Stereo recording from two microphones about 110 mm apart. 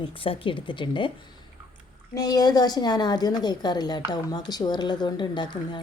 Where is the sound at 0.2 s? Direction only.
50° left (ahead or behind).